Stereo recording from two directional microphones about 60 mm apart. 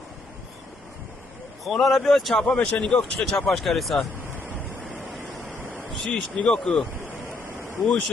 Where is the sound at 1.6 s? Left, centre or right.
Centre.